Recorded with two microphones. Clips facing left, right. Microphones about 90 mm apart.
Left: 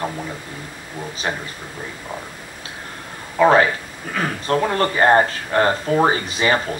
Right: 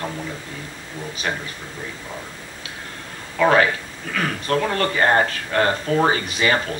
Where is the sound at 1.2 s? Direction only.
30° left (ahead or behind).